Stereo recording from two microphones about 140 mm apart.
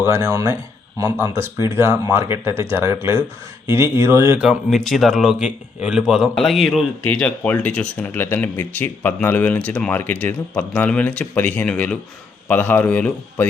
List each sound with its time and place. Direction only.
0.0 s speech: 20° right (ahead or behind)
4.4 s speech: centre (ahead or behind)